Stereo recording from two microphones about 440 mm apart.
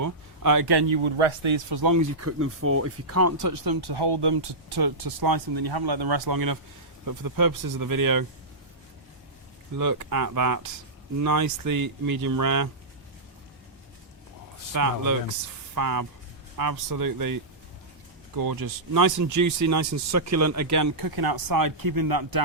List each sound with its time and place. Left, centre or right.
0.0 s speech: right
1.8 s speech: right
9.7 s speech: right
14.7 s speech: right